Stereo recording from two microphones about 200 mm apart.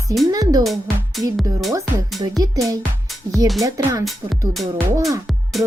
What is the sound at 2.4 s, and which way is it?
Music, 15° right (ahead or behind).